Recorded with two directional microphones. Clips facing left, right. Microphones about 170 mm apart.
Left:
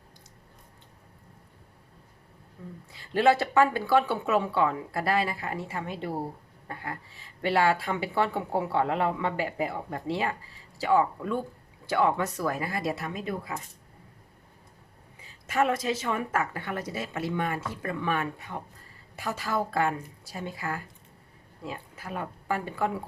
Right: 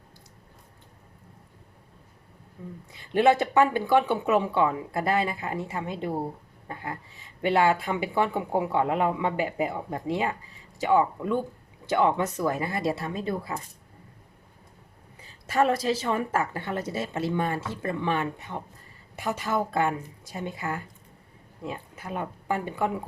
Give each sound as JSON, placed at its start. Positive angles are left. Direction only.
{"t": 2.6, "sound": "a woman's voice", "side_deg": -20}
{"t": 15.4, "sound": "a woman's voice", "side_deg": -35}